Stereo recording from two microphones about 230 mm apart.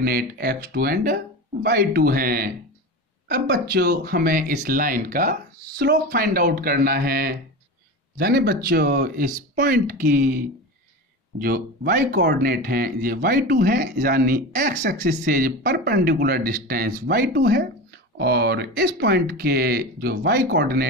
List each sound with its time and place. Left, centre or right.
0.0 s speech: right